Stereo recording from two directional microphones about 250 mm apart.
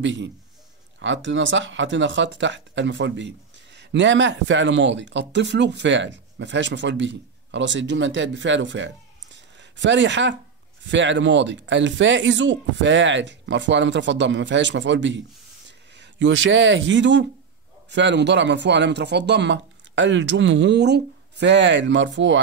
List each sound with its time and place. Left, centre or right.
0.0 s speech: right